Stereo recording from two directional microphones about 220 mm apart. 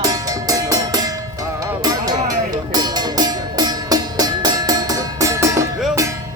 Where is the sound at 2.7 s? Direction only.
20° right (ahead or behind).